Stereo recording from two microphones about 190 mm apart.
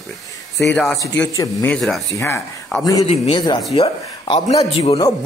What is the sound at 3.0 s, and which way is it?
A man's voice, 25° left (ahead or behind).